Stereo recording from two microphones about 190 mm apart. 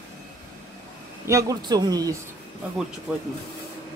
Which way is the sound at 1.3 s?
15° right (ahead or behind).